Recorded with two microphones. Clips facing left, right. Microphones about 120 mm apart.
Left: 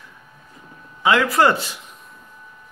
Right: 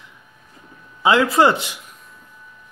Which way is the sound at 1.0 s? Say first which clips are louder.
Right 2 dB; 25° right (ahead or behind).